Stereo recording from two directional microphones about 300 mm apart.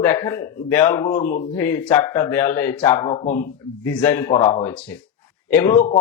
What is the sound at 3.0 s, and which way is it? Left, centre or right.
Speech, centre.